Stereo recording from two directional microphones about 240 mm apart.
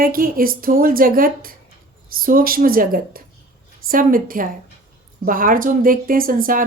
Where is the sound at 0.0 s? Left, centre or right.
Right.